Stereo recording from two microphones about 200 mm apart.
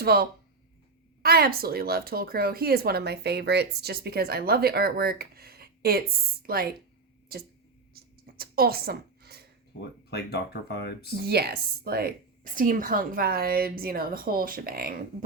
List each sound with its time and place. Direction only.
0.0 s speech: 50° right (ahead or behind)
7.9 s a sound: 50° right (ahead or behind)
10.1 s speech: 55° left (ahead or behind)
11.2 s speech: 55° right (ahead or behind)